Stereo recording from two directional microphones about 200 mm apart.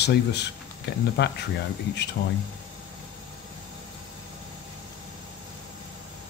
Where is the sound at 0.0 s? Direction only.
60° left (ahead or behind).